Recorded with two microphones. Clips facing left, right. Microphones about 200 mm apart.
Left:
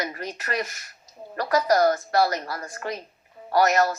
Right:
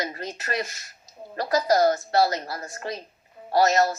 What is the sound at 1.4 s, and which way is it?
Speech, 35° right (ahead or behind).